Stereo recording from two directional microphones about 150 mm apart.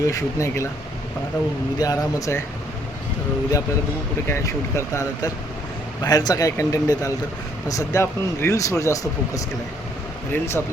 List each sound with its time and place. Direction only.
0.0 s speech: 20° left (ahead or behind)
1.8 s speech: 25° left (ahead or behind)
4.3 s speech: 20° left (ahead or behind)